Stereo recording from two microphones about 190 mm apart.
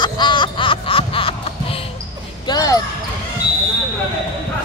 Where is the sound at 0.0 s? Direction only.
25° left (ahead or behind).